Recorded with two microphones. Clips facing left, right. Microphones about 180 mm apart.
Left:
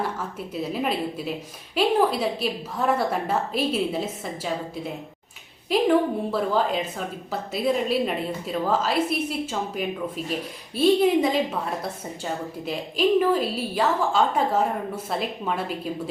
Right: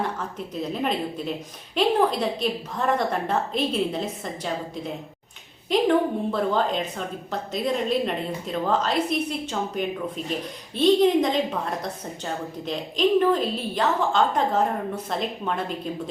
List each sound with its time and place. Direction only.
0.0 s a woman's voice: 5° left (ahead or behind)